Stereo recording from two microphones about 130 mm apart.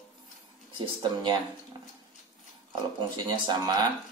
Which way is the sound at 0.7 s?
35° right (ahead or behind).